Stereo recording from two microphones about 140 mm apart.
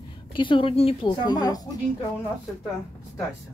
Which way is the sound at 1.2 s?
30° left (ahead or behind).